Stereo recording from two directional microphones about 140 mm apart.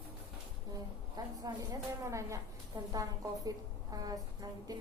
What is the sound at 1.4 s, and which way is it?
A woman's voice, 25° right (ahead or behind).